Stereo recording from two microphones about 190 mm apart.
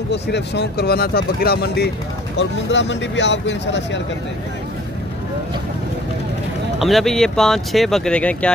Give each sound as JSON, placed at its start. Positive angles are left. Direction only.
{"t": 0.1, "sound": "speech", "side_deg": 65}
{"t": 2.3, "sound": "speech", "side_deg": 70}
{"t": 6.8, "sound": "speech", "side_deg": 0}